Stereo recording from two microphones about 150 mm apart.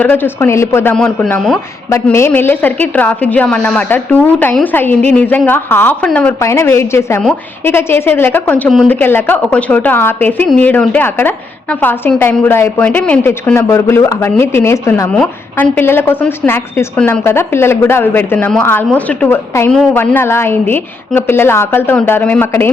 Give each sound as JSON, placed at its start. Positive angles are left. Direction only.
{"t": 0.0, "sound": "a woman's voice", "side_deg": 10}
{"t": 0.9, "sound": "a man's voice", "side_deg": 5}
{"t": 2.1, "sound": "a woman's voice", "side_deg": 15}
{"t": 15.1, "sound": "a woman's voice", "side_deg": 5}
{"t": 19.7, "sound": "a man's voice", "side_deg": 5}
{"t": 20.0, "sound": "a woman's voice", "side_deg": 15}